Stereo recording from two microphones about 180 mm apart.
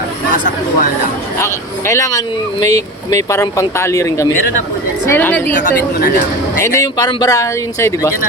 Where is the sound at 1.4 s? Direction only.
15° left (ahead or behind).